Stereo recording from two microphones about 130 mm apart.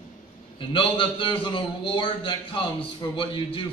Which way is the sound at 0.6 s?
40° left (ahead or behind).